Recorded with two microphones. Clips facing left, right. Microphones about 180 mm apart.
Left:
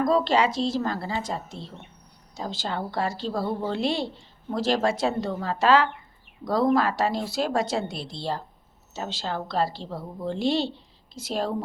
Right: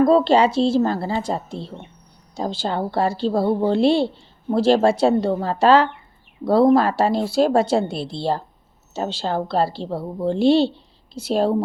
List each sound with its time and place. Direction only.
0.0 s a woman's voice: 30° right (ahead or behind)